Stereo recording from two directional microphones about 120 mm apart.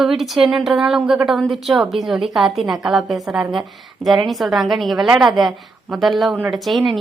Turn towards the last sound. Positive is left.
turn(degrees=0)  # may be behind; listen again after turning